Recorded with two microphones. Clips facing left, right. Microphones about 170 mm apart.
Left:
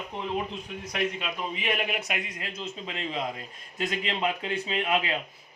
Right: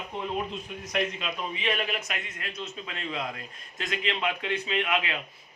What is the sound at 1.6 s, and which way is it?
Speech, 10° left (ahead or behind).